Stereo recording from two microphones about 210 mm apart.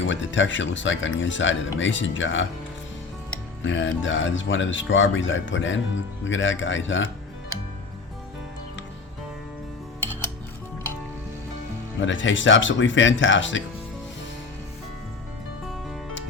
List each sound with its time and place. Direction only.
0.0 s speech: 60° left (ahead or behind)
3.6 s speech: 65° left (ahead or behind)
11.9 s speech: 65° left (ahead or behind)